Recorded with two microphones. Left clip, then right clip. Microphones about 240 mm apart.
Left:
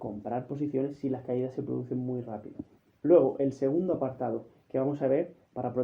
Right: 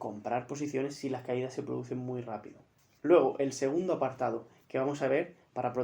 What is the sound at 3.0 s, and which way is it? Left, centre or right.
Speech, right.